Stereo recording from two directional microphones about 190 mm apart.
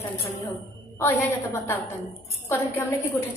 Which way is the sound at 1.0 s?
10° left (ahead or behind).